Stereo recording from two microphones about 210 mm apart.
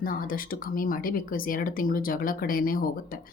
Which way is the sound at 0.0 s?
40° left (ahead or behind).